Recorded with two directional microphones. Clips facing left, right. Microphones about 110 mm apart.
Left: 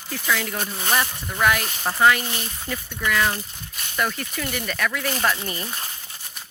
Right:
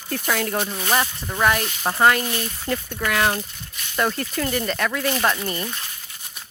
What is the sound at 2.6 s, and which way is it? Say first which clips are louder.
Speech: right 1 dB; 50° right (ahead or behind).